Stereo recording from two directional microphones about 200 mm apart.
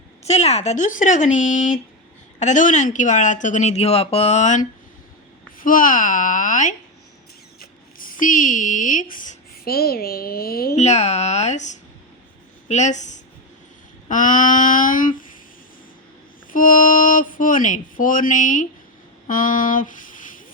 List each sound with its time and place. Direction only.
0.3 s a woman's voice: 35° left (ahead or behind); by 10.8 s 50° left (ahead or behind)
10.8 s speech: 35° left (ahead or behind)
16.5 s speech: 40° left (ahead or behind)